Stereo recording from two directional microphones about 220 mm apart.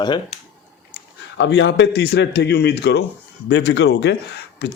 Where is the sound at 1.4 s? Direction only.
55° left (ahead or behind).